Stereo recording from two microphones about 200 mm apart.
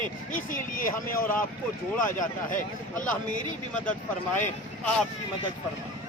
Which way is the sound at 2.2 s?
40° left (ahead or behind).